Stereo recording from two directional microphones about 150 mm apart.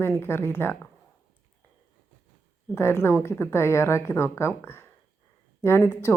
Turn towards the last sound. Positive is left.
turn(degrees=15)  # may be behind; listen again after turning